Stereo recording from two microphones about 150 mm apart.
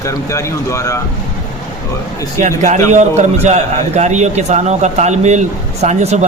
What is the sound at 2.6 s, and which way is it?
A man's voice, 55° right (ahead or behind).